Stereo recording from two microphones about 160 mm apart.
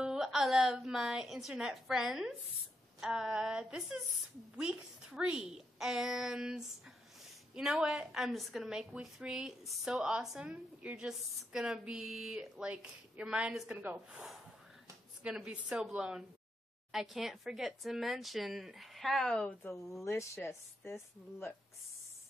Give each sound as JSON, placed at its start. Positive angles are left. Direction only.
{"t": 0.0, "sound": "a woman's voice", "side_deg": -5}
{"t": 20.0, "sound": "speech", "side_deg": 20}